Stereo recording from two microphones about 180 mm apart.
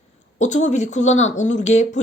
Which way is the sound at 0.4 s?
40° left (ahead or behind).